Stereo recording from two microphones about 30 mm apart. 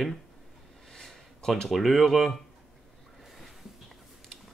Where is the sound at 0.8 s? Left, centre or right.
Centre.